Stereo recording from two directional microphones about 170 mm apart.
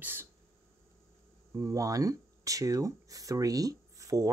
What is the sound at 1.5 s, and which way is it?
Speech, 20° right (ahead or behind).